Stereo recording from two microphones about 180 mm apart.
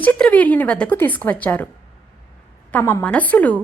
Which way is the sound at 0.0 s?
10° left (ahead or behind).